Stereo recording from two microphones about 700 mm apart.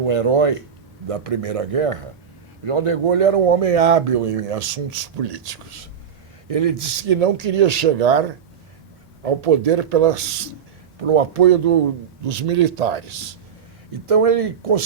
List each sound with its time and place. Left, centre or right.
0.0 s speech: right
9.2 s speech: right
14.1 s speech: right